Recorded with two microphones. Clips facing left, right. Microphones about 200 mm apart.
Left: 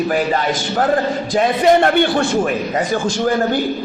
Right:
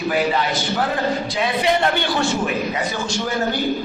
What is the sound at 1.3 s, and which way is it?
A man's voice, 45° left (ahead or behind).